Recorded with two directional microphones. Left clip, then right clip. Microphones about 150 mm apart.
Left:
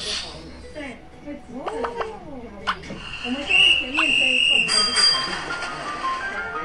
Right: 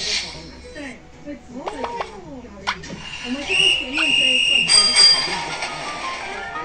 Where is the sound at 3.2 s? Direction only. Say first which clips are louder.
Left 1 dB; 10° right (ahead or behind).